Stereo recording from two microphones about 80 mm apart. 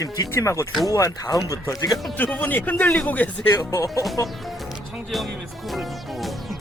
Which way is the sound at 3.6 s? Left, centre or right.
Left.